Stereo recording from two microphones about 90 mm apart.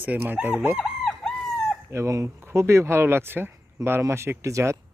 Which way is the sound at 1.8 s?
30° right (ahead or behind).